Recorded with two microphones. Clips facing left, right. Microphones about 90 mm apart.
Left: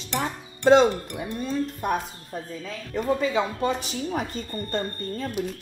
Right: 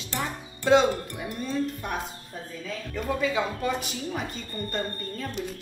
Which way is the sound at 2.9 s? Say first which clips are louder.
Left 4 dB; 30° left (ahead or behind).